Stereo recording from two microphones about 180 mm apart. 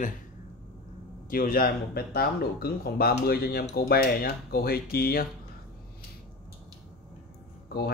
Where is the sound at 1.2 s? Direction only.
50° left (ahead or behind).